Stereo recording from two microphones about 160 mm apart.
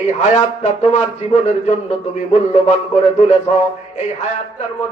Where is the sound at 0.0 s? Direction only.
45° left (ahead or behind).